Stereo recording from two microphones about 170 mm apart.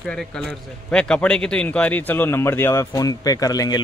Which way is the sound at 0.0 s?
5° left (ahead or behind).